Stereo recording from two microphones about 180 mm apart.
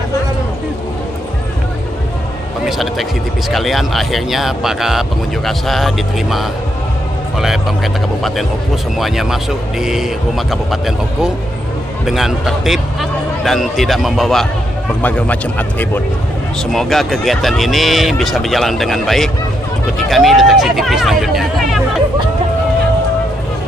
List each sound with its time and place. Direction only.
2.6 s speech: centre (ahead or behind)